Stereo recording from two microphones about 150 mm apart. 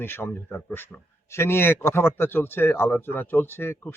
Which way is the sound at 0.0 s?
15° left (ahead or behind).